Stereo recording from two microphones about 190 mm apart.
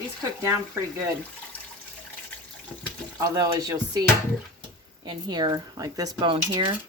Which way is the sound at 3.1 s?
20° right (ahead or behind).